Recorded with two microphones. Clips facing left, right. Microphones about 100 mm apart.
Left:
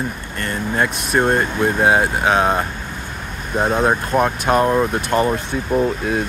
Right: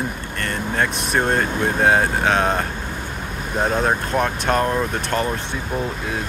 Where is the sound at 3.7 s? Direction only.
10° left (ahead or behind).